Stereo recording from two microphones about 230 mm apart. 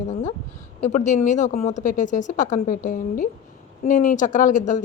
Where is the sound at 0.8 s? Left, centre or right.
Left.